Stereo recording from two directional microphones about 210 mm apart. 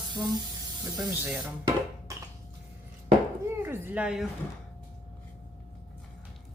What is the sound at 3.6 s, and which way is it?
Speech, 10° right (ahead or behind).